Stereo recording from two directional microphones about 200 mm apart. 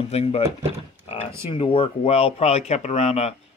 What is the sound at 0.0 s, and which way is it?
Speech, 30° left (ahead or behind).